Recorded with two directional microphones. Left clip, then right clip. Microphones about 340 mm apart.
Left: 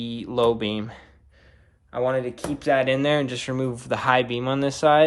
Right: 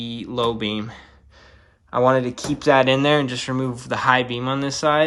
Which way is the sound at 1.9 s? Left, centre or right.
Centre.